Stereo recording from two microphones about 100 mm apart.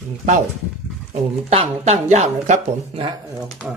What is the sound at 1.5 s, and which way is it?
Speech, 85° right.